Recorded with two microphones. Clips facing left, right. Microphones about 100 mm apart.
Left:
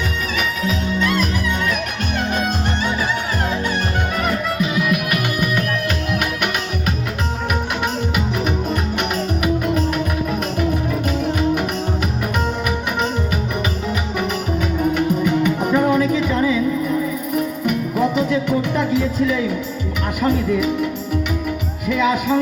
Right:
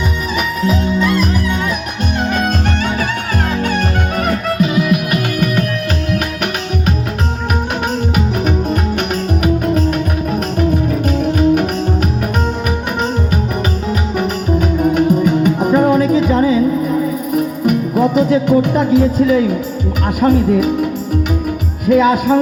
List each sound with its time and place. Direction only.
0.9 s music: 5° right (ahead or behind)
4.3 s music: 50° right (ahead or behind)
6.1 s music: 40° right (ahead or behind)
9.0 s music: 45° right (ahead or behind)
11.2 s music: 45° right (ahead or behind)
14.2 s music: 40° right (ahead or behind)
20.2 s speech: 45° right (ahead or behind)
21.8 s speech: 45° right (ahead or behind)